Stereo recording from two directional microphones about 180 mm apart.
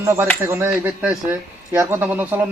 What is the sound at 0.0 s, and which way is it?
A man's voice, 15° right (ahead or behind).